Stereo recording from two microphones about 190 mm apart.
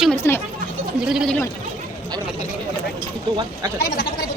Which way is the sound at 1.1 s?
Centre (ahead or behind).